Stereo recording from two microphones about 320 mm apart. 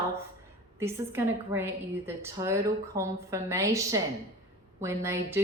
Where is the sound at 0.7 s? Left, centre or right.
Centre.